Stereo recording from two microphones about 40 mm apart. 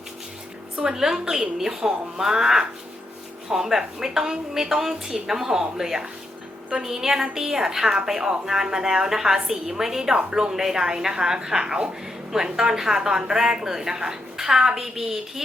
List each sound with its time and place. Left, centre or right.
0.9 s a woman's voice: centre